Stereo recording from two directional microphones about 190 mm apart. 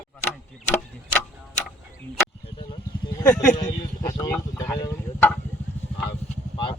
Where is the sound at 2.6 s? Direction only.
20° left (ahead or behind).